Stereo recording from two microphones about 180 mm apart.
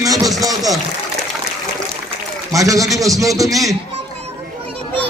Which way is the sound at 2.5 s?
20° right (ahead or behind).